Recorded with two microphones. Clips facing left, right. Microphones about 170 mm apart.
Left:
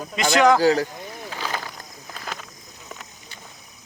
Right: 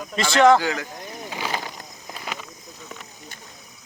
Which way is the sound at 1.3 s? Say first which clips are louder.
Right 2 dB; 15° right (ahead or behind).